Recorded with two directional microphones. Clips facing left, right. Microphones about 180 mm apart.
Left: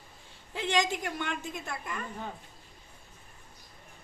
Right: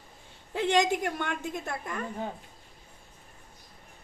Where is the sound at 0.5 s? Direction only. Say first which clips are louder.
Right 4 dB; 55° right (ahead or behind).